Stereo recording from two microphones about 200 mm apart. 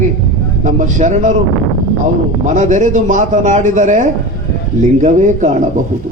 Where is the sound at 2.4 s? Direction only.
40° right (ahead or behind).